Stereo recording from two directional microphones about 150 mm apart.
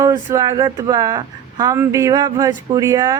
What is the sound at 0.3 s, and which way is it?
Speech, 25° right (ahead or behind).